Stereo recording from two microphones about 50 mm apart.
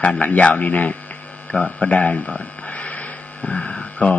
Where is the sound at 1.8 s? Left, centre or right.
Left.